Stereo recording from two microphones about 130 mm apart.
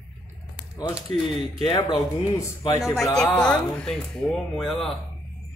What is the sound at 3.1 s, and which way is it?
A woman's voice, 10° left (ahead or behind).